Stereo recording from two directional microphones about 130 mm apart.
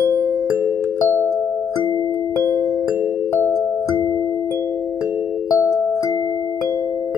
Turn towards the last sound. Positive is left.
turn(degrees=25)  # may be behind; listen again after turning